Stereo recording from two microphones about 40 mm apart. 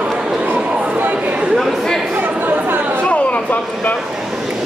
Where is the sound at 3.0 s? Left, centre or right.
Left.